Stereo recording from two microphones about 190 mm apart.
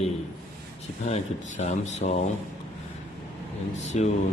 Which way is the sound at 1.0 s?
35° left (ahead or behind).